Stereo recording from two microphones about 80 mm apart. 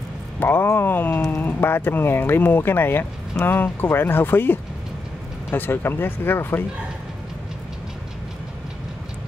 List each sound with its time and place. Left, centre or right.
0.4 s speech: left